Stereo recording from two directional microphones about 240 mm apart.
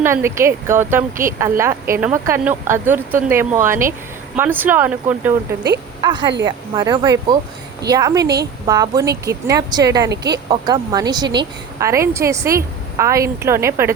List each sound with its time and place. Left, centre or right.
0.0 s a woman's voice: centre
6.0 s a woman's voice: centre
10.1 s speech: right
10.5 s a woman's voice: centre